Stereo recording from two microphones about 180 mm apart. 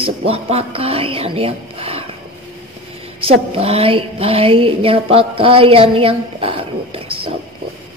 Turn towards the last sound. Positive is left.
turn(degrees=-30)  # may be behind; listen again after turning